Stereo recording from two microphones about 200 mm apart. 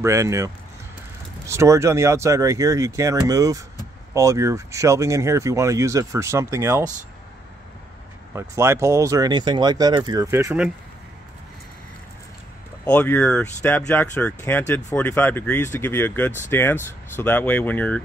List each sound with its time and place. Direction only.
0.0 s speech: 15° right (ahead or behind)
8.4 s speech: 15° right (ahead or behind)
12.8 s speech: 10° left (ahead or behind)